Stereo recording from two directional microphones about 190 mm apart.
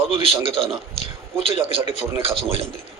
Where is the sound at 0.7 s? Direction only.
30° right (ahead or behind).